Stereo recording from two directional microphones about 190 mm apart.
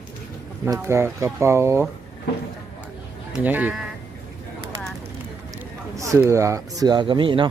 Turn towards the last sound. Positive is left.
turn(degrees=-25)  # may be behind; listen again after turning